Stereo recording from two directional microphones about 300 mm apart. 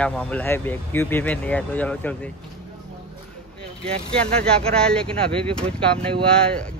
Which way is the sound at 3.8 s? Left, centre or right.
Centre.